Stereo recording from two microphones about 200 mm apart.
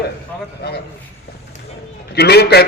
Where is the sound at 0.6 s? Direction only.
55° left (ahead or behind).